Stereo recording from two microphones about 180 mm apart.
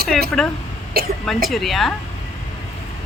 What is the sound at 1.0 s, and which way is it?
Speech, 55° right (ahead or behind).